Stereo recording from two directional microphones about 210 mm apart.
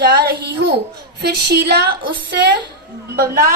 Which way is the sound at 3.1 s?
45° right (ahead or behind).